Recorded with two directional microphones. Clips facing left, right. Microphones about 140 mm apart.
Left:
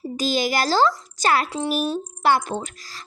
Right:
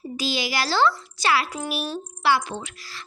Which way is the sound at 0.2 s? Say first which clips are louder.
Left 5 dB; 45° left (ahead or behind).